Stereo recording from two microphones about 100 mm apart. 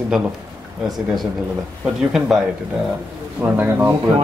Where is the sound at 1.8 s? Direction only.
5° right (ahead or behind).